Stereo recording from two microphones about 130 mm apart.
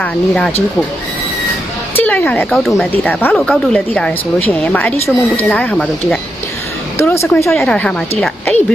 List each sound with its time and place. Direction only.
0.0 s a woman's voice: 5° left (ahead or behind)
2.0 s a woman's voice: 15° left (ahead or behind)
2.5 s speech: centre (ahead or behind)
3.1 s a woman's voice: 15° left (ahead or behind)
3.3 s a woman's voice: 5° left (ahead or behind)
7.1 s speech: 20° left (ahead or behind)
7.5 s a woman's voice: 5° left (ahead or behind)